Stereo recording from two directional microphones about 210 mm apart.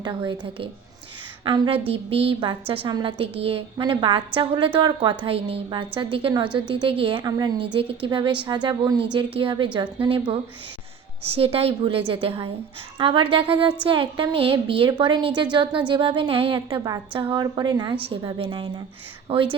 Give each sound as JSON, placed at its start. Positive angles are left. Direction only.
{"t": 0.0, "sound": "a woman's voice", "side_deg": -25}
{"t": 11.3, "sound": "a woman's voice", "side_deg": -25}